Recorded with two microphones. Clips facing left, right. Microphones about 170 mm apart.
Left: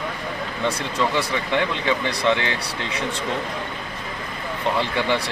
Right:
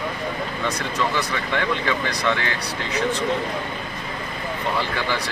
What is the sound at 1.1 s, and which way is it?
Speech, 25° left (ahead or behind).